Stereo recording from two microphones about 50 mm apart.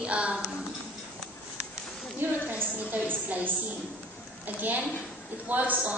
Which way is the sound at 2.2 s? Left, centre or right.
Right.